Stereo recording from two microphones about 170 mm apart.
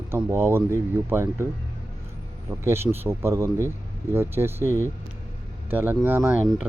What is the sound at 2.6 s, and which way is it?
Speech, 15° right (ahead or behind).